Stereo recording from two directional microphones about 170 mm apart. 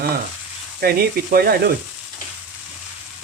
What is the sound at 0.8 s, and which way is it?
Speech, 65° right (ahead or behind).